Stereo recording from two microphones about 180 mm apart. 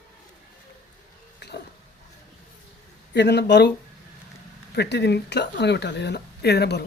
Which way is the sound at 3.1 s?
70° left (ahead or behind).